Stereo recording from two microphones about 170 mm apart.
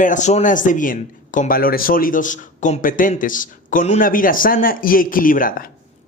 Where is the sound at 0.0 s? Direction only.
45° left (ahead or behind).